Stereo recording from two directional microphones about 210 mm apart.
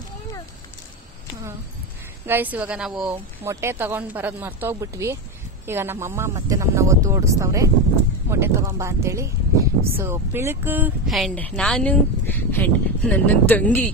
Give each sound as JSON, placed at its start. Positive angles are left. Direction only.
{"t": 2.2, "sound": "speech", "side_deg": -10}